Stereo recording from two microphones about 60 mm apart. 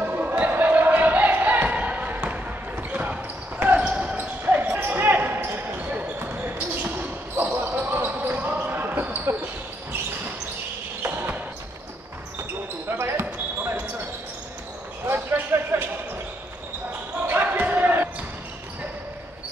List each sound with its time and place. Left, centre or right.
0.0 s a sound: right
3.8 s basketball bounce: centre
4.2 s basketball bounce: right
11.1 s basketball bounce: right
12.9 s basketball bounce: right
15.0 s basketball bounce: right
17.3 s basketball bounce: right